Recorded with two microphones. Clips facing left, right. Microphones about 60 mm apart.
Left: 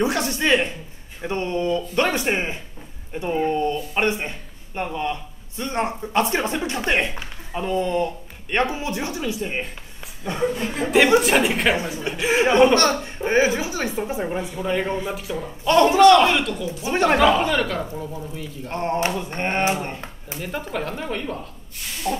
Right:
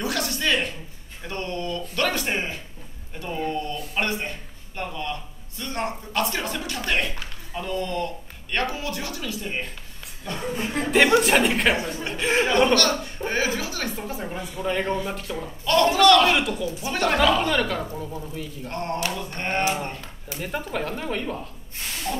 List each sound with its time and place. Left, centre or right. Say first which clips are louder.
0.0 s speech: left 5 dB; left
10.7 s speech: left 1 dB; centre
12.7 s speech: left 3 dB; left
14.6 s speech: even; centre
15.6 s speech: left 4 dB; left
16.3 s speech: left 1 dB; centre
16.6 s speech: left 4 dB; left
17.5 s speech: left 1 dB; centre
18.7 s speech: left 5 dB; left
20.3 s speech: left 1 dB; centre
22.1 s speech: left 4 dB; centre